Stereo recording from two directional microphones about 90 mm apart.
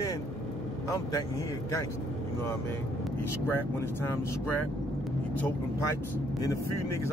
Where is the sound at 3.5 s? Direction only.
25° left (ahead or behind).